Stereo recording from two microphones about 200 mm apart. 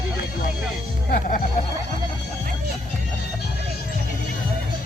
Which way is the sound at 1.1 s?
45° left (ahead or behind).